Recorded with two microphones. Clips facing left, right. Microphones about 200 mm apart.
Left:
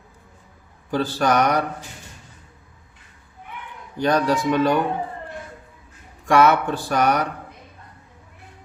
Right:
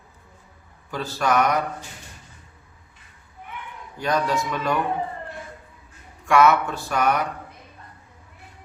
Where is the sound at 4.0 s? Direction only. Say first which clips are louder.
Left 4 dB; 35° left (ahead or behind).